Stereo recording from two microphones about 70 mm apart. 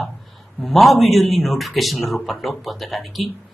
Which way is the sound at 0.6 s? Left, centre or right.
Centre.